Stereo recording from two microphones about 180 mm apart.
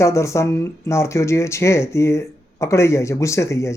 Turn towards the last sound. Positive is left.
turn(degrees=15)  # may be behind; listen again after turning